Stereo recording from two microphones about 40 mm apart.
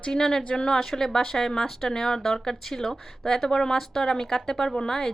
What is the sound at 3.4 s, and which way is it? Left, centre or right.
A woman's voice, centre.